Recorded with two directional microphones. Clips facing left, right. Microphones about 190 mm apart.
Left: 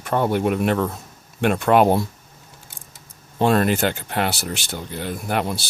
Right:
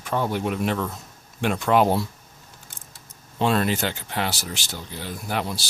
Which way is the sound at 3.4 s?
50° left (ahead or behind).